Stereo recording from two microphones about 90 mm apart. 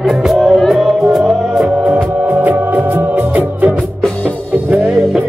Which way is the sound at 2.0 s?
20° right (ahead or behind).